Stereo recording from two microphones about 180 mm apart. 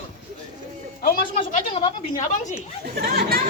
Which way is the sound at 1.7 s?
30° left (ahead or behind).